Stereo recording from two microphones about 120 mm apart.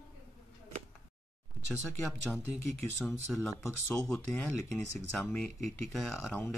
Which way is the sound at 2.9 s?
Centre (ahead or behind).